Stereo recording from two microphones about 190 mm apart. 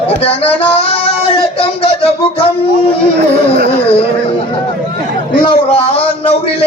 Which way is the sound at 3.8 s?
30° left (ahead or behind).